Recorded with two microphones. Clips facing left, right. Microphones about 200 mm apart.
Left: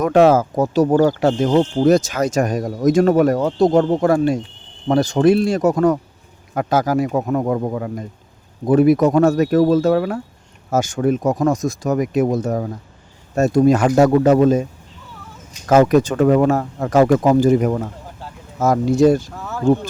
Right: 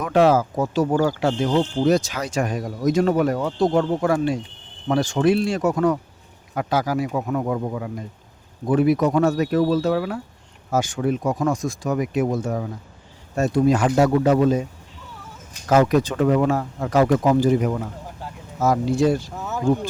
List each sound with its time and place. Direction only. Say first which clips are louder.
0.0 s speech: left 4 dB; 45° left (ahead or behind)
15.7 s speech: left 4 dB; 45° left (ahead or behind)
19.3 s speech: even; 20° right (ahead or behind)